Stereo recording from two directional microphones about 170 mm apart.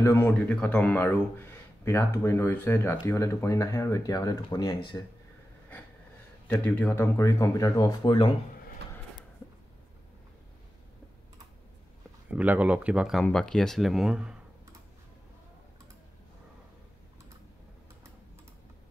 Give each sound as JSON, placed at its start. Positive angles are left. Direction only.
{"t": 0.0, "sound": "speech", "side_deg": 10}
{"t": 6.4, "sound": "speech", "side_deg": 10}
{"t": 12.3, "sound": "speech", "side_deg": -10}